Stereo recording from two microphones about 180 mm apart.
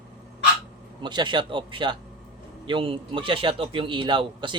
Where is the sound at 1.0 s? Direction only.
25° right (ahead or behind).